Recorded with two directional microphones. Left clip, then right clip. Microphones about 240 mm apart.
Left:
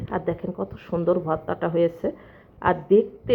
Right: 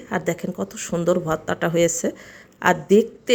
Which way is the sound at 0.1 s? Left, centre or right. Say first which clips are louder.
Right 3 dB; centre.